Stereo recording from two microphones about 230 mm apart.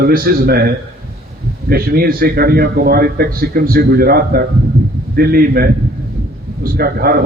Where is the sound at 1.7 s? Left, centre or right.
Right.